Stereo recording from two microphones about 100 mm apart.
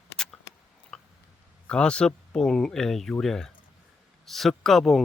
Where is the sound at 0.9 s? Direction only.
10° left (ahead or behind).